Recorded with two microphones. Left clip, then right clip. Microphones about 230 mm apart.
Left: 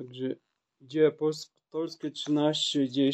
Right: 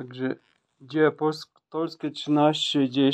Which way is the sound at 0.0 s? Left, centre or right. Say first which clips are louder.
Right 4 dB; centre.